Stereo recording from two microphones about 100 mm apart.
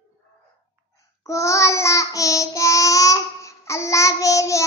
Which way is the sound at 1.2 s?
30° left (ahead or behind).